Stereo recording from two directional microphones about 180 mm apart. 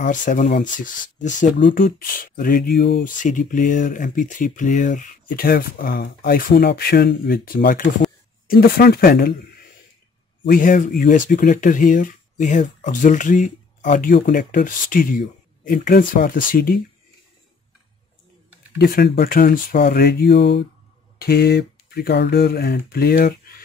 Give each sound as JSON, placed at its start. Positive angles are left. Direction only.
{"t": 0.0, "sound": "speech", "side_deg": 45}
{"t": 1.7, "sound": "speech", "side_deg": 70}
{"t": 2.1, "sound": "speech", "side_deg": 50}
{"t": 10.5, "sound": "speech", "side_deg": 50}
{"t": 18.8, "sound": "speech", "side_deg": 60}
{"t": 21.2, "sound": "speech", "side_deg": 60}